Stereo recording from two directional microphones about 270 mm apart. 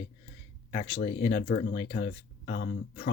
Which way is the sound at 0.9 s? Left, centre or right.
Left.